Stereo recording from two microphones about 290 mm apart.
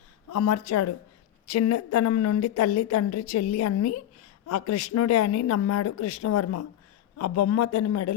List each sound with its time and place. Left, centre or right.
0.3 s a woman's voice: left